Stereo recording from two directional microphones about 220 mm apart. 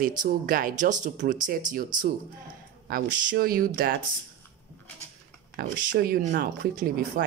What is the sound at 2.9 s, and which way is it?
A woman's voice, 40° right (ahead or behind).